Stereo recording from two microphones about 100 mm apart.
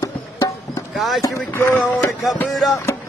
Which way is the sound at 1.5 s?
20° left (ahead or behind).